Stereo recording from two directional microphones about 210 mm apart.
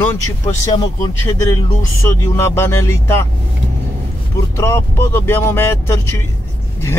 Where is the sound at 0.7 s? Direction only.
20° left (ahead or behind).